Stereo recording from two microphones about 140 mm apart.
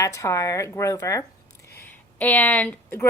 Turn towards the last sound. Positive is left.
turn(degrees=15)  # may be behind; listen again after turning